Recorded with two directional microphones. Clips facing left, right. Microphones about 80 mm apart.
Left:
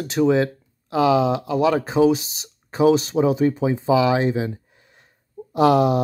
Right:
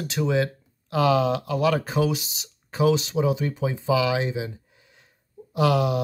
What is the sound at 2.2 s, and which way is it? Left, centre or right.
Speech, left.